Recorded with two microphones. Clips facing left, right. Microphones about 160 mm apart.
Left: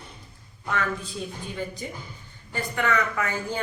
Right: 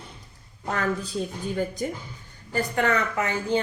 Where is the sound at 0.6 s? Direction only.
40° right (ahead or behind).